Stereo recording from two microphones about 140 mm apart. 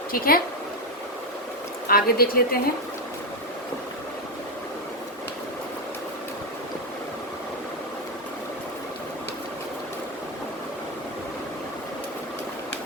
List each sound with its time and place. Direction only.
0.1 s speech: 90° left
1.9 s speech: 90° left